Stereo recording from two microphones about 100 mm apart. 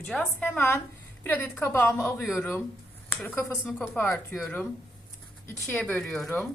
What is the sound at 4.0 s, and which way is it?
Speech, 15° left (ahead or behind).